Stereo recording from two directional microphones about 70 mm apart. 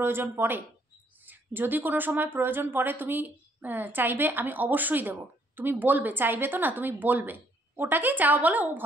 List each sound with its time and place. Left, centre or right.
0.0 s speech: right